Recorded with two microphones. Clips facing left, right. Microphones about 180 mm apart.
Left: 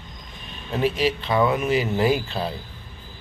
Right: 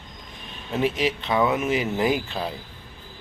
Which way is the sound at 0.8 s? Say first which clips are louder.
Left 2 dB; 20° right (ahead or behind).